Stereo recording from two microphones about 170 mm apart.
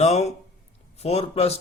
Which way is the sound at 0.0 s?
40° left (ahead or behind).